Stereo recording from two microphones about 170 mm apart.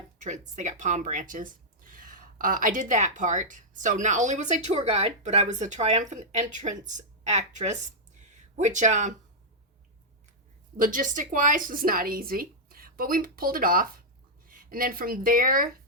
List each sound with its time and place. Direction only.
0.2 s speech: 45° right (ahead or behind)
10.8 s a woman's voice: 55° right (ahead or behind)